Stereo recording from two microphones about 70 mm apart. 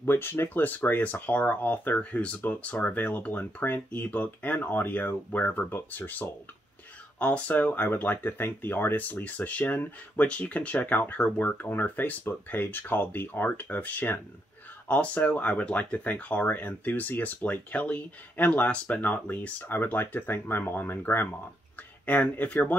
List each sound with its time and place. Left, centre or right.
0.0 s speech: left